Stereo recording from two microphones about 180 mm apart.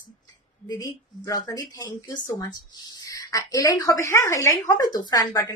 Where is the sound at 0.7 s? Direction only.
20° left (ahead or behind).